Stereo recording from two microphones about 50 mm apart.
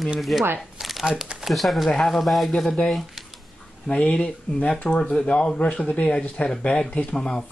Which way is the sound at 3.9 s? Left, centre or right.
Left.